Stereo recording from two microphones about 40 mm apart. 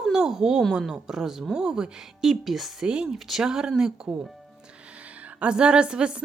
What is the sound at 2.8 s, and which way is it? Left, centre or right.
Speech, right.